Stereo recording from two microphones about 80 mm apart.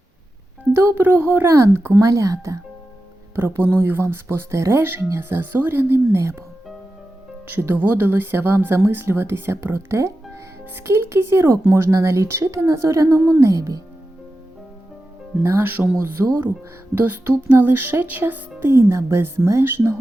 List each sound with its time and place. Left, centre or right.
0.8 s speech: right
1.5 s speech: right
3.3 s speech: right
7.6 s speech: right
15.4 s speech: right